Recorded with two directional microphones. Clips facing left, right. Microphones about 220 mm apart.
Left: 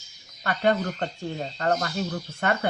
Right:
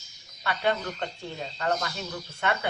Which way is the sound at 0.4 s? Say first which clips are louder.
Left 4 dB; 45° left (ahead or behind).